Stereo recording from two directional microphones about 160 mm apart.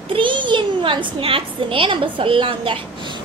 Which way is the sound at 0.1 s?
30° right (ahead or behind).